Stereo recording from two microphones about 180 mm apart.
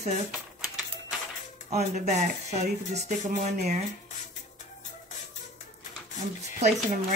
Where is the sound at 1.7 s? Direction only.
40° right (ahead or behind).